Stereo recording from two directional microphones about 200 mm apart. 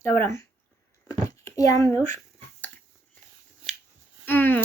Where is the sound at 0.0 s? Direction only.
10° left (ahead or behind).